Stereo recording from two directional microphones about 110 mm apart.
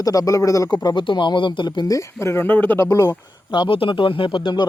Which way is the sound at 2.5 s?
15° left (ahead or behind).